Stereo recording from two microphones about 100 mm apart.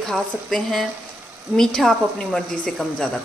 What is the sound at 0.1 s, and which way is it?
A woman's voice, centre (ahead or behind).